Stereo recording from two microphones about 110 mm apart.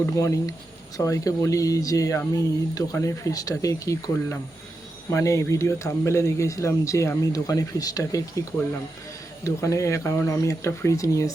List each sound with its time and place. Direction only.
0.0 s speech: 30° left (ahead or behind)